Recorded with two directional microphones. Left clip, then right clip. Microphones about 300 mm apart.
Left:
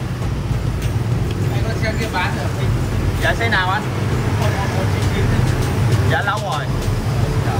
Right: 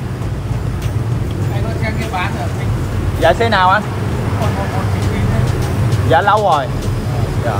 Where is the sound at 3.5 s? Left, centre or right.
Right.